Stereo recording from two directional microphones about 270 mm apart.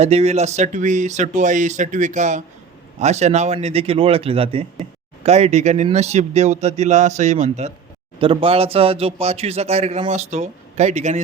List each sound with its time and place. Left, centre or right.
0.0 s a man's voice: right